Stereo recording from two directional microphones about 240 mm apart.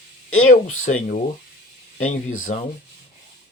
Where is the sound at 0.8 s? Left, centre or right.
Left.